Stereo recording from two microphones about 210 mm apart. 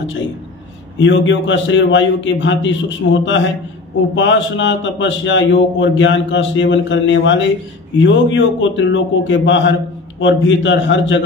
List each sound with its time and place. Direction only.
0.9 s a man's voice: 60° left (ahead or behind)